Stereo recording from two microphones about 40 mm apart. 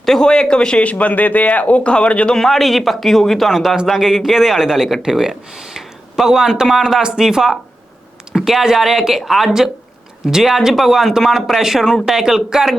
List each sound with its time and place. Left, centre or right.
0.0 s speech: centre
0.3 s speech: left
0.8 s speech: left
2.3 s speech: centre